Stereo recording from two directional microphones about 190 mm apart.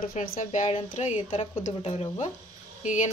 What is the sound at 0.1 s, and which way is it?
Speech, 45° left (ahead or behind).